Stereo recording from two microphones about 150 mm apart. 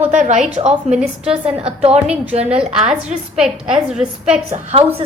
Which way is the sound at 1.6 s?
40° right (ahead or behind).